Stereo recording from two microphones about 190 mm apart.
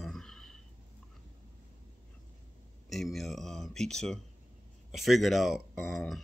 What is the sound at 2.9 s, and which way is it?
Speech, centre (ahead or behind).